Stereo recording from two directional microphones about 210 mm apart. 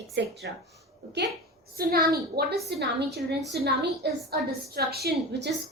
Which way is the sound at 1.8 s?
45° right (ahead or behind).